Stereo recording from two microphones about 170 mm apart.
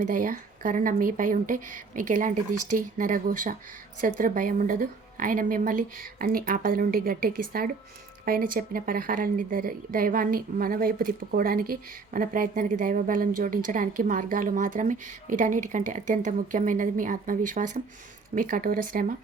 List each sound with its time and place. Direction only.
0.0 s a woman's voice: 50° right (ahead or behind)